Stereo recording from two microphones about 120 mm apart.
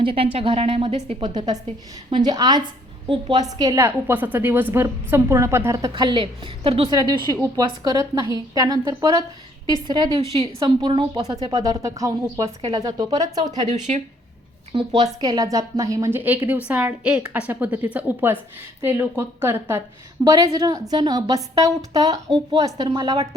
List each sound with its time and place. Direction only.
0.0 s a woman's voice: 50° right (ahead or behind)
1.2 s a woman's voice: 35° right (ahead or behind)
5.9 s a woman's voice: 40° right (ahead or behind)
6.6 s a woman's voice: 55° right (ahead or behind)
6.8 s a woman's voice: 35° right (ahead or behind)
10.2 s a woman's voice: 55° right (ahead or behind)
10.6 s a woman's voice: 35° right (ahead or behind)
13.7 s speech: 75° right (ahead or behind)
14.7 s speech: 40° right (ahead or behind)
15.2 s a woman's voice: 30° right (ahead or behind)
20.2 s a woman's voice: 30° right (ahead or behind)